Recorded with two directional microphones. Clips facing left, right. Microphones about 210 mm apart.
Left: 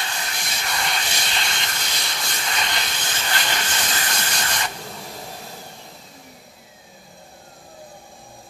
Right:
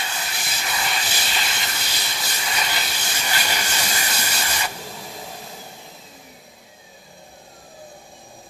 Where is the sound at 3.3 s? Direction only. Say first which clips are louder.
Even; 10° right (ahead or behind).